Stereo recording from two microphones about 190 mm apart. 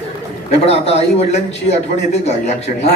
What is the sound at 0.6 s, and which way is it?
Speech, 35° left (ahead or behind).